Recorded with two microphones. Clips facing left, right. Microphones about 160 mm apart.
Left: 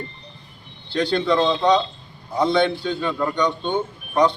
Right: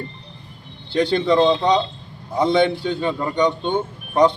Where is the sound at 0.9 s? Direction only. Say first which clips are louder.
Right 3 dB; 15° right (ahead or behind).